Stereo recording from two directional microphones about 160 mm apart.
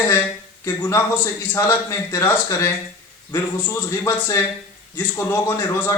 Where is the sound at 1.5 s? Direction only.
20° left (ahead or behind).